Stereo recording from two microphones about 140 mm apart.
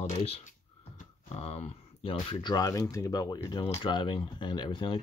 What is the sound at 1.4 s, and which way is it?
Speech, 50° left (ahead or behind).